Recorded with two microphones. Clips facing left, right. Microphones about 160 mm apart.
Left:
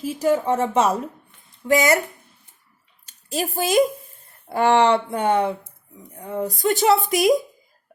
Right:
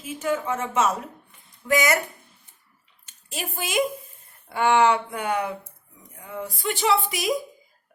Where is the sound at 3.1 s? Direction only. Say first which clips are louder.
Left 8 dB; 35° left (ahead or behind).